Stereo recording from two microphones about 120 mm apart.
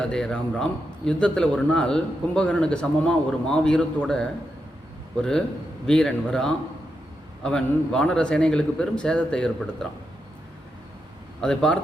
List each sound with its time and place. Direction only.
0.0 s a man's voice: 5° left (ahead or behind)
5.8 s a man's voice: 5° left (ahead or behind)
11.3 s speech: 5° left (ahead or behind)